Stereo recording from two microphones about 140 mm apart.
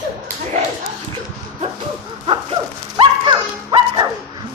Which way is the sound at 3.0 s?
35° right (ahead or behind).